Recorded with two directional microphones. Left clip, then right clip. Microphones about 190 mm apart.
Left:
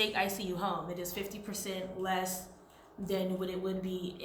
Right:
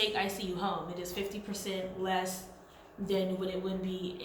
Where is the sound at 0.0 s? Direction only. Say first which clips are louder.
Even; 45° left (ahead or behind).